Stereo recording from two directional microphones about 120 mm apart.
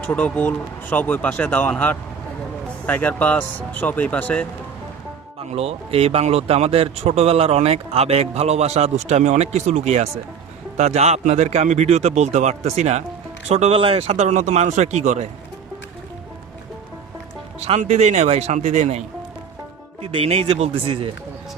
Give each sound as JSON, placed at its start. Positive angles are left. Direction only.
{"t": 0.0, "sound": "speech", "side_deg": 15}
{"t": 2.8, "sound": "speech", "side_deg": 15}
{"t": 5.4, "sound": "speech", "side_deg": -55}
{"t": 17.6, "sound": "speech", "side_deg": -65}
{"t": 20.0, "sound": "speech", "side_deg": -50}